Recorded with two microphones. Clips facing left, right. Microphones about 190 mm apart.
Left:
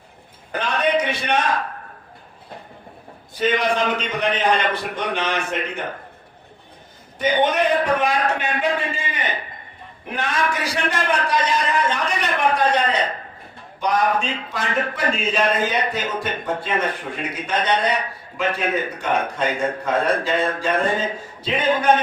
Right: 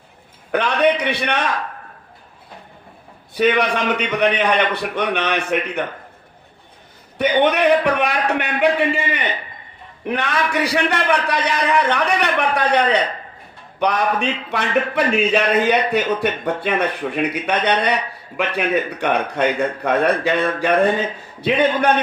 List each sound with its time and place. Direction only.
0.5 s a man's voice: 65° right (ahead or behind)
3.3 s speech: 65° right (ahead or behind)
7.2 s speech: 65° right (ahead or behind)